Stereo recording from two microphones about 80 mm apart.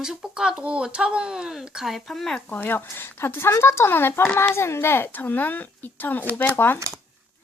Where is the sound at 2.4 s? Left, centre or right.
Left.